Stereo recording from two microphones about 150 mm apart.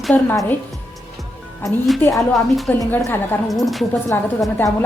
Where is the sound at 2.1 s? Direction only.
Centre (ahead or behind).